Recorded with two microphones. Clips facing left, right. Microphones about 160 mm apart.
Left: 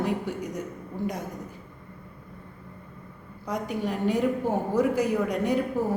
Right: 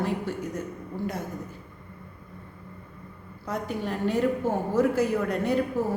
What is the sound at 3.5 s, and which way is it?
A woman's voice, 15° left (ahead or behind).